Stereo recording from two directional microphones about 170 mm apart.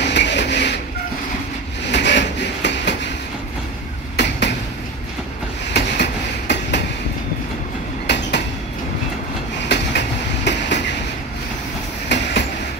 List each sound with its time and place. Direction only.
0.0 s a sound: 90° left
1.9 s train: 90° left
4.2 s a sound: 90° left
5.7 s train: 90° left
8.1 s train: 90° left
9.7 s train: 90° left